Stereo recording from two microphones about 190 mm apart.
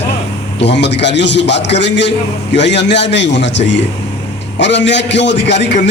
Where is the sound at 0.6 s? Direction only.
65° left (ahead or behind).